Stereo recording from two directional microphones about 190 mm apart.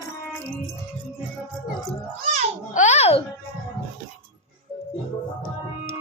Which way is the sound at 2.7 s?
40° left (ahead or behind).